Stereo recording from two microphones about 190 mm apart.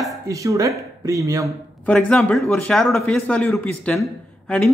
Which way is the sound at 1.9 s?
5° left (ahead or behind).